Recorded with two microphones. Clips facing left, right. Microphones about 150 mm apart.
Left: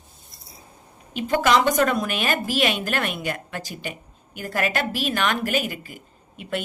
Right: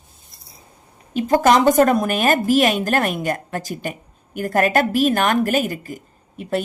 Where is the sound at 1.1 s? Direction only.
40° right (ahead or behind).